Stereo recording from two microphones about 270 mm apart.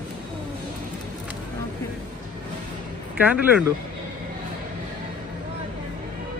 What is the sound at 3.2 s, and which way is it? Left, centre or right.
Speech, centre.